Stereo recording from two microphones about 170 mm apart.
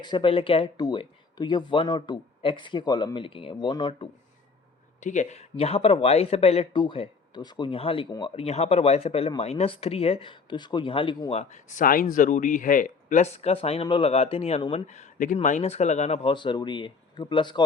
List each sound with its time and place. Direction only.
0.0 s speech: 30° left (ahead or behind)
4.9 s speech: 45° left (ahead or behind); by 17.6 s 30° left (ahead or behind)